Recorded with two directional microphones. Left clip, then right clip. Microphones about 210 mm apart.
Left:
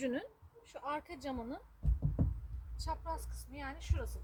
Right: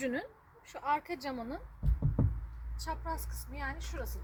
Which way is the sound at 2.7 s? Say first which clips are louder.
Right 2 dB; 35° right (ahead or behind).